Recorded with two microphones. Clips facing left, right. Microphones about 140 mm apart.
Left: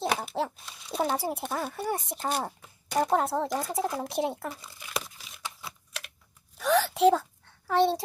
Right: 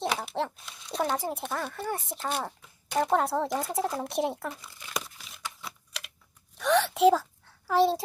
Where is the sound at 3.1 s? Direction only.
Centre (ahead or behind).